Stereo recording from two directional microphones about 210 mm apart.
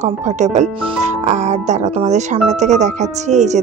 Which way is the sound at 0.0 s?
35° right (ahead or behind).